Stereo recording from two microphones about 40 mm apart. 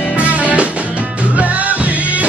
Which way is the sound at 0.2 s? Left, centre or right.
Right.